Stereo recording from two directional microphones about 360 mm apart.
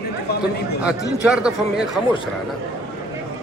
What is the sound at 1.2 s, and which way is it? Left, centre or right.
Speech, centre.